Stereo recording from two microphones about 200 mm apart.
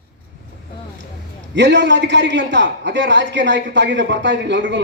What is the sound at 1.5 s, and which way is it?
A man's voice, 60° right (ahead or behind).